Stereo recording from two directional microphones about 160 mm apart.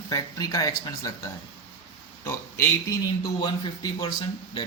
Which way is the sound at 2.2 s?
15° left (ahead or behind).